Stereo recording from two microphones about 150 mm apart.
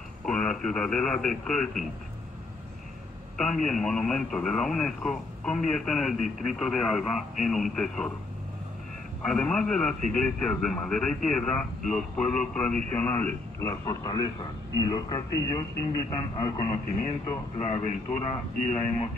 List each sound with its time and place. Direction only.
0.2 s speech: 5° left (ahead or behind)
3.3 s speech: 5° left (ahead or behind)
9.3 s a man's voice: 5° left (ahead or behind); by 16.6 s 30° left (ahead or behind)
17.6 s a man's voice: 45° left (ahead or behind)